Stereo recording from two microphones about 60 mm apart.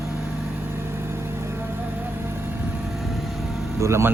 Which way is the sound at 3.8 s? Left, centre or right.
Right.